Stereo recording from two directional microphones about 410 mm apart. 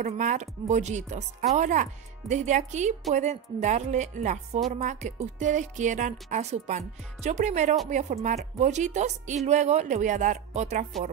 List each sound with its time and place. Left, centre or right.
0.0 s speech: centre